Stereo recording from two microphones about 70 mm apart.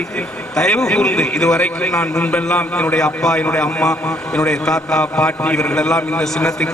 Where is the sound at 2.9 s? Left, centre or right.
Centre.